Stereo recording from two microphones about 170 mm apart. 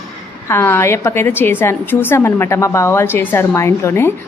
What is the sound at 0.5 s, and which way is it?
A woman's voice, 15° left (ahead or behind).